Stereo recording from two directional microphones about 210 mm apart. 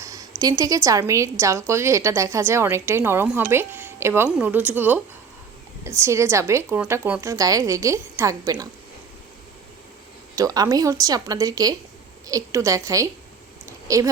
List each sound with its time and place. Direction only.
0.0 s a woman's voice: 15° right (ahead or behind)
10.3 s a woman's voice: 15° right (ahead or behind)
13.7 s a sound: 15° right (ahead or behind)